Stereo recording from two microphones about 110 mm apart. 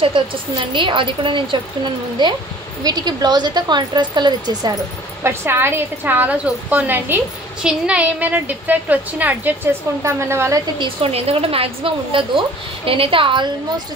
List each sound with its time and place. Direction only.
0.7 s a woman's voice: 50° right (ahead or behind)
5.2 s a woman's voice: 20° right (ahead or behind)
10.8 s a woman's voice: 60° right (ahead or behind)